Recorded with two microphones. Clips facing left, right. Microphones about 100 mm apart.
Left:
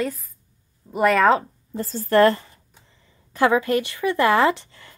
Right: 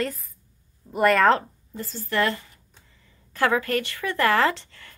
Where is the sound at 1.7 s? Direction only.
35° left (ahead or behind).